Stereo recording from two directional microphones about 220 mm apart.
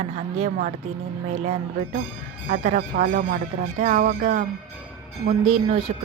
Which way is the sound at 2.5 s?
35° right (ahead or behind).